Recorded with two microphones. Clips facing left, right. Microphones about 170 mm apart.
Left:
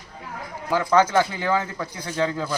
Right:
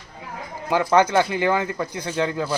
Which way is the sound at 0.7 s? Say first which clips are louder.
Right 1 dB; 20° right (ahead or behind).